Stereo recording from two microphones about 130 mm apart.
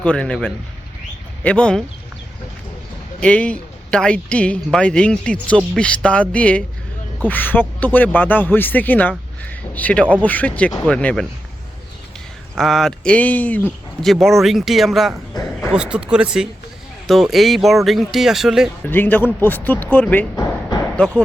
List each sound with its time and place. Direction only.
0.0 s speech: 10° left (ahead or behind)
1.5 s speech: 10° left (ahead or behind)
3.2 s speech: 10° left (ahead or behind)
12.5 s speech: centre (ahead or behind)
14.0 s speech: centre (ahead or behind)
18.9 s speech: 15° left (ahead or behind)